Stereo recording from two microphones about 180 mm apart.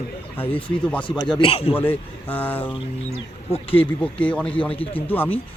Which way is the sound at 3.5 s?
30° left (ahead or behind).